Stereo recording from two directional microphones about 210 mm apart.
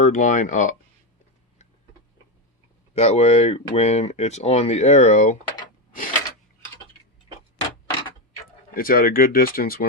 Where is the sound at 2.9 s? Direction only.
30° left (ahead or behind).